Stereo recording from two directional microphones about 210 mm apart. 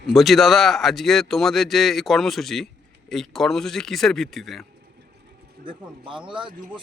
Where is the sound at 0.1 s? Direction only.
Centre (ahead or behind).